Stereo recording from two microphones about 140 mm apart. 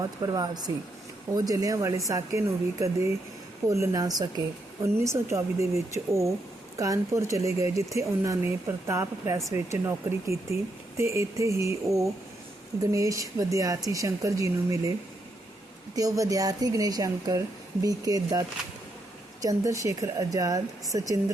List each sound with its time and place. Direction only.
0.2 s speech: 25° right (ahead or behind)
16.0 s speech: 25° right (ahead or behind)